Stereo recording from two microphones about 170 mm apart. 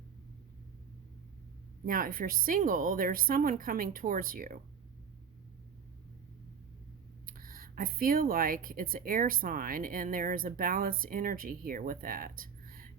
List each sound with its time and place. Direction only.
1.8 s speech: 55° right (ahead or behind)
7.3 s speech: 55° right (ahead or behind)